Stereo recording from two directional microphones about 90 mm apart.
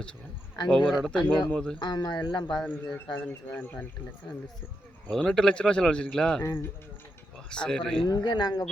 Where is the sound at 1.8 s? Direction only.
50° left (ahead or behind).